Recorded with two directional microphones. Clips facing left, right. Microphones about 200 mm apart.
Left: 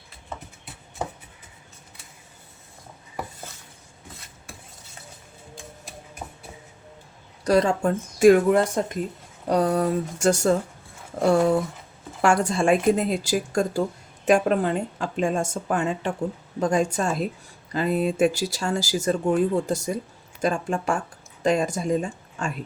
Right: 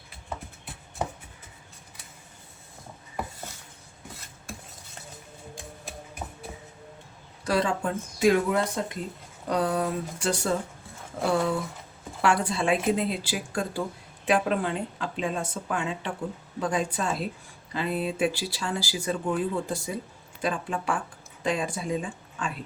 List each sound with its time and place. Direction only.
6.2 s a sound: 10° left (ahead or behind)
7.4 s speech: 40° left (ahead or behind)
12.2 s speech: 45° left (ahead or behind)